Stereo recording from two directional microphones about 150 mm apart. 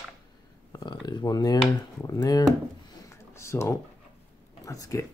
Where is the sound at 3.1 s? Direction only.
20° left (ahead or behind).